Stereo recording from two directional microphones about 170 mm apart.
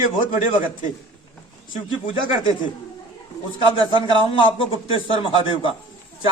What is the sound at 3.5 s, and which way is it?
Speech, 30° left (ahead or behind).